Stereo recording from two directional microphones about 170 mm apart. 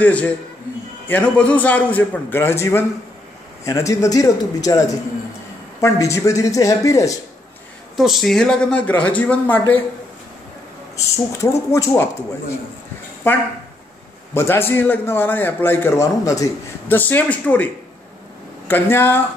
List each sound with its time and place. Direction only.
0.0 s a man's voice: 10° left (ahead or behind)
7.9 s speech: centre (ahead or behind)
11.4 s a man's voice: 15° left (ahead or behind)
13.2 s a man's voice: 10° left (ahead or behind)
18.7 s a man's voice: 10° left (ahead or behind)